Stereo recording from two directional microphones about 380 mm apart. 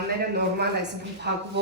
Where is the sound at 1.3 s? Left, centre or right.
Right.